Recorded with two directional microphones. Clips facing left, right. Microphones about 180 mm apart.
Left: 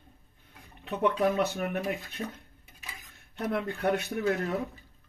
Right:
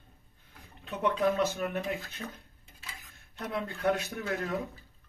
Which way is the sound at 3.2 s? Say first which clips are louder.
Left 4 dB; 60° left (ahead or behind).